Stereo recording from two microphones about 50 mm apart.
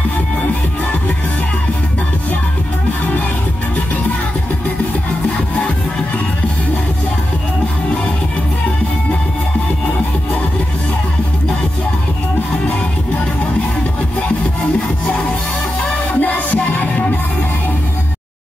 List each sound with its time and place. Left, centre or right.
15.8 s music: left